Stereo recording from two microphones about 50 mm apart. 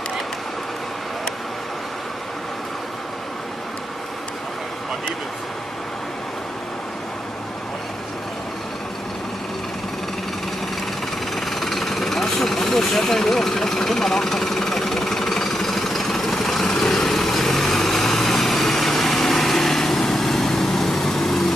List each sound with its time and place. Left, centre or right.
11.3 s vehicle: centre